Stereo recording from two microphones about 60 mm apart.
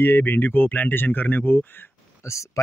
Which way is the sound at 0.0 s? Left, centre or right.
Left.